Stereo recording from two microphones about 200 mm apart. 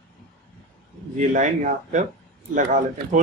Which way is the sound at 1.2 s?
40° right (ahead or behind).